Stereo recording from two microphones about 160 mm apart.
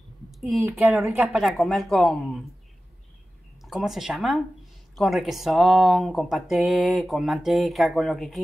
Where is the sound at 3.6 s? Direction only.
Centre (ahead or behind).